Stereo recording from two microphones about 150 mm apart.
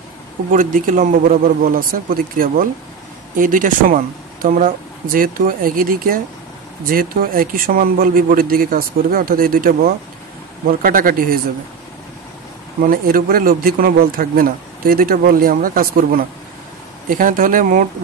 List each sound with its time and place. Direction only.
0.5 s speech: 60° right (ahead or behind)
12.8 s speech: 75° right (ahead or behind)